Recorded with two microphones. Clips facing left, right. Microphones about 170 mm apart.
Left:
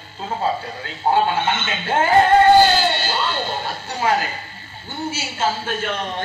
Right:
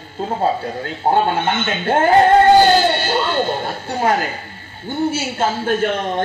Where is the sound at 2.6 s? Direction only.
50° right (ahead or behind).